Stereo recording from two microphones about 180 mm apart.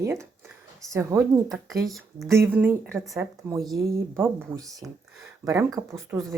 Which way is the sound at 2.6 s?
10° right (ahead or behind).